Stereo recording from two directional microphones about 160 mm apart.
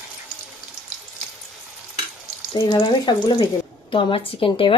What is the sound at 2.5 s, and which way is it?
Speech, 30° left (ahead or behind).